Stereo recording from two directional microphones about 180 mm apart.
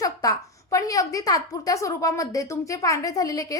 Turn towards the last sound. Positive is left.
turn(degrees=20)  # may be behind; listen again after turning